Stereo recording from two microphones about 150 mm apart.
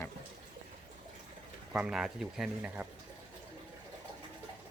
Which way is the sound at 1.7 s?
5° right (ahead or behind).